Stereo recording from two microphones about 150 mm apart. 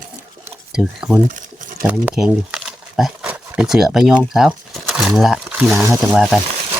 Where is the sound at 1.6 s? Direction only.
60° right (ahead or behind).